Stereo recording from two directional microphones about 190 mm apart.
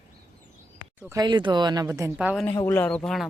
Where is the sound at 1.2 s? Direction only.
25° right (ahead or behind); by 2.4 s 5° right (ahead or behind).